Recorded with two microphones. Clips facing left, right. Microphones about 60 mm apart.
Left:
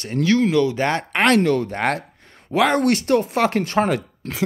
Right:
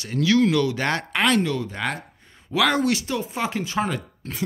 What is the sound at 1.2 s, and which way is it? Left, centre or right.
Speech, left.